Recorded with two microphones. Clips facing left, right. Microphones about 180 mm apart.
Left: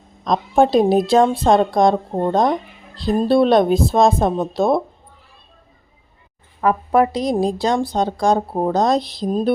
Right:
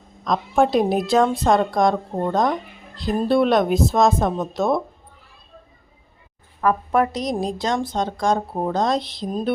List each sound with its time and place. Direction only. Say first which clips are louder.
0.3 s a woman's voice: left 3 dB; 30° left (ahead or behind)
6.6 s a woman's voice: left 3 dB; 20° left (ahead or behind); by 9.5 s 35° left (ahead or behind)